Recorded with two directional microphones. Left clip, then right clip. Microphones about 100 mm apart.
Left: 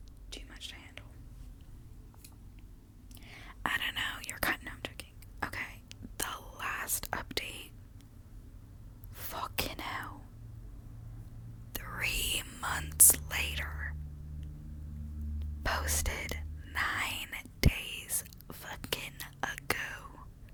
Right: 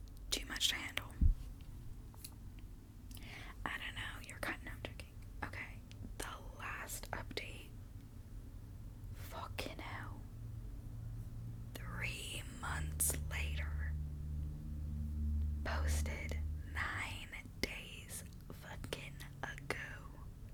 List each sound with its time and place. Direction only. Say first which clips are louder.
0.3 s whispering: right 9 dB; 35° right (ahead or behind)
3.2 s whispering: left 1 dB; 5° left (ahead or behind)
3.6 s whispering: left 11 dB; 35° left (ahead or behind)
9.1 s whispering: left 9 dB; 35° left (ahead or behind)
11.7 s whispering: left 10 dB; 30° left (ahead or behind)
15.6 s whispering: left 10 dB; 35° left (ahead or behind)